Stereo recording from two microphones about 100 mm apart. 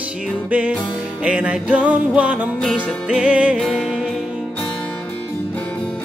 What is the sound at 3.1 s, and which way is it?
Music, 10° right (ahead or behind).